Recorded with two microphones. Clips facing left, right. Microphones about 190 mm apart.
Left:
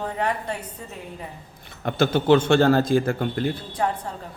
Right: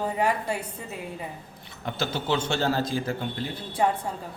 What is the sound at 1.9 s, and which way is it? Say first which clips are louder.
A man's voice: left 9 dB; 55° left (ahead or behind).